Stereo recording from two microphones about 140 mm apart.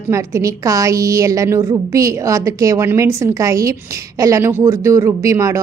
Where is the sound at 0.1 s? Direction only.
20° right (ahead or behind).